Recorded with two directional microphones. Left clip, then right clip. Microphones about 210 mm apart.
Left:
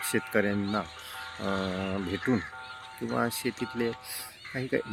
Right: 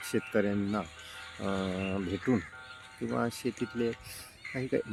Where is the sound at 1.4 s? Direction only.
20° right (ahead or behind).